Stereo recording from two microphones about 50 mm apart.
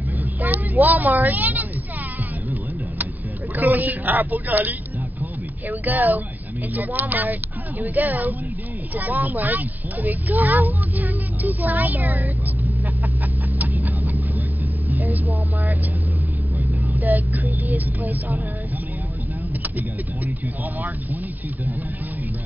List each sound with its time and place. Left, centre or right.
0.4 s a sound: right
3.5 s speech: right
13.6 s vehicle: right
16.5 s vehicle: right
17.6 s speech: right